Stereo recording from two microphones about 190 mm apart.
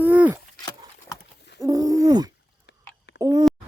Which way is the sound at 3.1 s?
15° right (ahead or behind).